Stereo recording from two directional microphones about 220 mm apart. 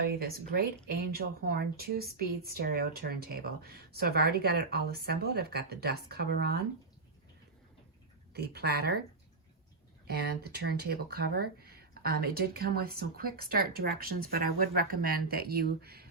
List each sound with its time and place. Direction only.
0.2 s speech: 45° right (ahead or behind)
8.3 s speech: 45° right (ahead or behind)
10.1 s speech: 45° right (ahead or behind)